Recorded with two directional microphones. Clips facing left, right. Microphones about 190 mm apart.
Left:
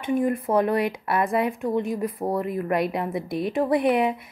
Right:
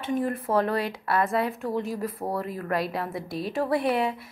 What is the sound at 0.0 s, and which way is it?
Speech, 15° left (ahead or behind).